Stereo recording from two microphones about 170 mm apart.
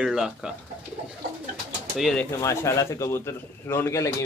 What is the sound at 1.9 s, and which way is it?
Speech, 5° left (ahead or behind).